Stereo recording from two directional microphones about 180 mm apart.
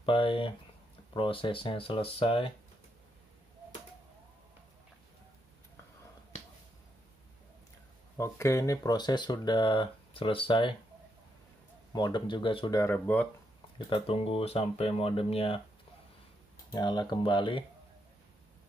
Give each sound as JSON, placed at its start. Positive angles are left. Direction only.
{"t": 0.0, "sound": "speech", "side_deg": 30}
{"t": 8.2, "sound": "speech", "side_deg": 15}
{"t": 11.9, "sound": "speech", "side_deg": 25}
{"t": 13.7, "sound": "speech", "side_deg": 30}
{"t": 16.7, "sound": "speech", "side_deg": 20}